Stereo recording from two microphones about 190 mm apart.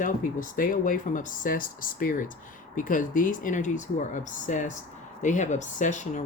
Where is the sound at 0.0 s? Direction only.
45° left (ahead or behind).